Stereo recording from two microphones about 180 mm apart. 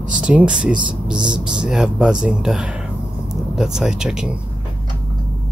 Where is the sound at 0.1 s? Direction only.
5° right (ahead or behind).